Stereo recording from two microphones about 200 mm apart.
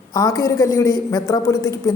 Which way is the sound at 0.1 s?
15° left (ahead or behind).